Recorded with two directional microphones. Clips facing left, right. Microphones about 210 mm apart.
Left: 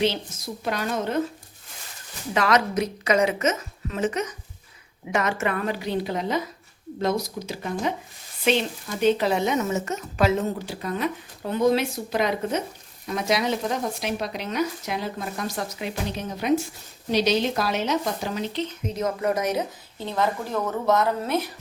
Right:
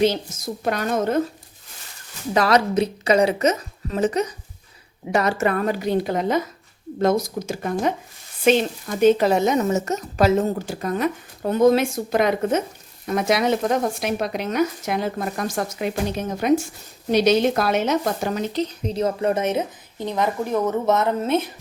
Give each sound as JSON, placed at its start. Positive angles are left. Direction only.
{"t": 0.0, "sound": "speech", "side_deg": -45}
{"t": 2.3, "sound": "a woman's voice", "side_deg": -35}